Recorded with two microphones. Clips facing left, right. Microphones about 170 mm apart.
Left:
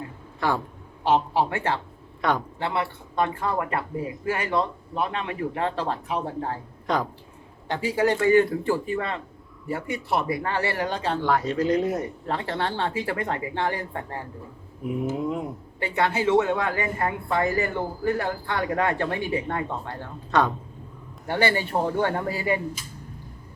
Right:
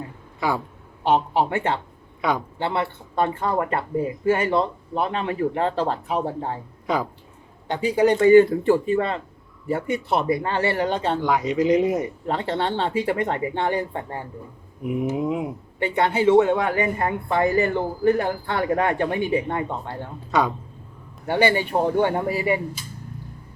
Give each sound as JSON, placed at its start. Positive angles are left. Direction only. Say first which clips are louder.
{"t": 0.3, "sound": "speech", "louder": "right 1 dB", "side_deg": -10}
{"t": 1.3, "sound": "a woman's voice", "louder": "right 2 dB", "side_deg": -20}
{"t": 6.8, "sound": "speech", "louder": "right 1 dB", "side_deg": -5}
{"t": 7.7, "sound": "a woman's voice", "louder": "right 4 dB", "side_deg": -20}
{"t": 11.3, "sound": "a woman's voice", "louder": "right 3 dB", "side_deg": -15}
{"t": 14.8, "sound": "speech", "louder": "right 3 dB", "side_deg": 0}
{"t": 15.8, "sound": "a woman's voice", "louder": "right 4 dB", "side_deg": -25}